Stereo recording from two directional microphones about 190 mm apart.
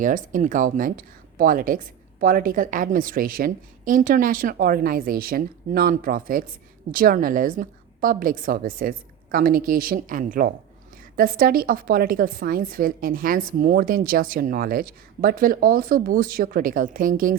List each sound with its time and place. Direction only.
0.0 s speech: 45° right (ahead or behind)